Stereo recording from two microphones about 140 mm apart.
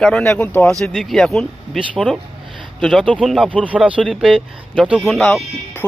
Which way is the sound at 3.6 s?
10° right (ahead or behind).